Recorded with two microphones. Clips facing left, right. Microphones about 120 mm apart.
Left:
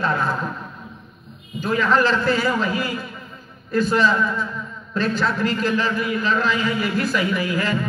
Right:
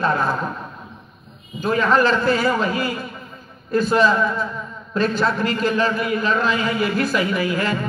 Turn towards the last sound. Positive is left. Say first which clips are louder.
# right 1 dB
turn(degrees=-25)  # may be behind; listen again after turning